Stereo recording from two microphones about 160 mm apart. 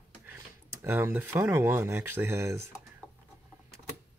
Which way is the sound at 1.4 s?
15° right (ahead or behind).